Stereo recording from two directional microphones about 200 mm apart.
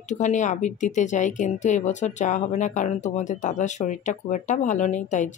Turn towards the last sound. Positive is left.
turn(degrees=35)  # may be behind; listen again after turning